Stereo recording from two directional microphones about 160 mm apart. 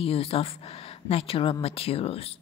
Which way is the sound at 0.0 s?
35° left (ahead or behind).